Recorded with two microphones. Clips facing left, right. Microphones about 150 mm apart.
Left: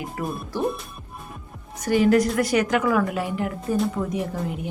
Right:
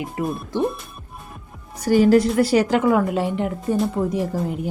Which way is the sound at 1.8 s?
35° right (ahead or behind).